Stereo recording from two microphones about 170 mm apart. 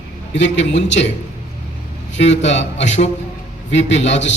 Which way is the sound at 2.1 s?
90° left.